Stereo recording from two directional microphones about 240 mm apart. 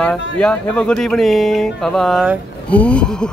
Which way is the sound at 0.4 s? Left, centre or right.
Centre.